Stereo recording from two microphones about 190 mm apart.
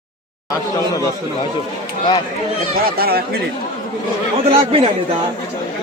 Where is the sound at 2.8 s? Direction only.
55° right (ahead or behind).